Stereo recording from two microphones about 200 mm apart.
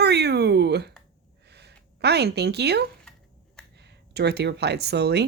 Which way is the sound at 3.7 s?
55° right (ahead or behind).